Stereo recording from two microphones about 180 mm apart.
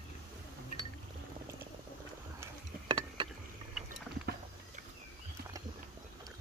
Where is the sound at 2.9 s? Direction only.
30° right (ahead or behind).